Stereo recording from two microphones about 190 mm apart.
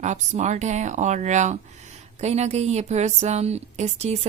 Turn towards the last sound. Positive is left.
turn(degrees=-35)  # may be behind; listen again after turning